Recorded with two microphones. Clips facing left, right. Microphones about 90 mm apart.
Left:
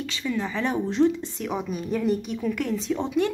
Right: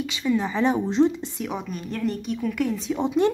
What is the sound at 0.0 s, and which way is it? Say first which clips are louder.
Speech: right 4 dB; 15° right (ahead or behind).